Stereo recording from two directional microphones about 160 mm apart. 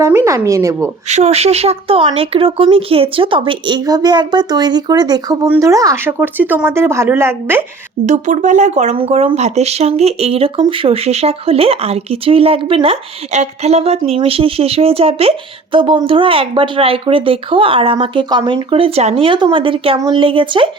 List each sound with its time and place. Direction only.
0.0 s a woman's voice: 15° right (ahead or behind)
1.0 s speech: 45° right (ahead or behind); by 7.6 s 15° right (ahead or behind)
8.0 s speech: 50° right (ahead or behind); by 20.7 s 30° right (ahead or behind)